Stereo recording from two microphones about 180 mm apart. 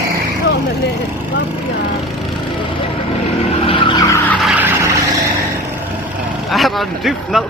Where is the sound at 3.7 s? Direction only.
30° left (ahead or behind).